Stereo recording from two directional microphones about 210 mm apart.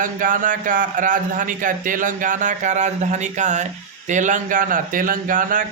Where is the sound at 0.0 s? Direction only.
40° right (ahead or behind).